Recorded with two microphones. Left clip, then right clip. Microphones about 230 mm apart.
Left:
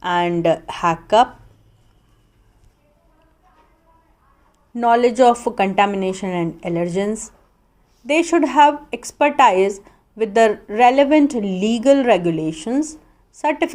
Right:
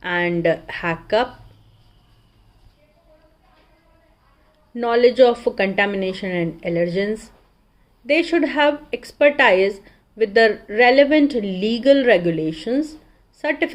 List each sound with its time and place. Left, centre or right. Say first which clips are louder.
0.0 s a woman's voice: left 2 dB; left
4.7 s a woman's voice: left 1 dB; left
8.0 s a woman's voice: left 1 dB; left